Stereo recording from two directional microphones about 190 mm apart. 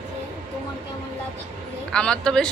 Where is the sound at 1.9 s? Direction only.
5° left (ahead or behind).